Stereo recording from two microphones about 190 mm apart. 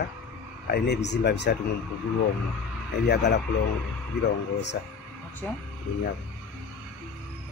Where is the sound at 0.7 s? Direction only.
60° left (ahead or behind).